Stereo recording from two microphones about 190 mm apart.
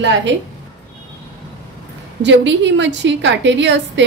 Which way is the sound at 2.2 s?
70° right (ahead or behind).